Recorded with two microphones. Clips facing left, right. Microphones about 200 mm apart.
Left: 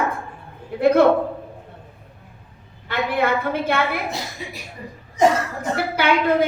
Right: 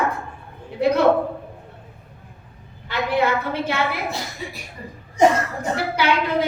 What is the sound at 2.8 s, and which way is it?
Speech, 55° left (ahead or behind).